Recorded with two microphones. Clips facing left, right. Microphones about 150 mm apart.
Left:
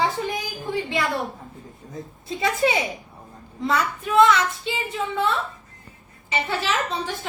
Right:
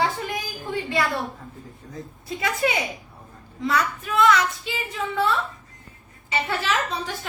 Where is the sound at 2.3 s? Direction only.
25° left (ahead or behind).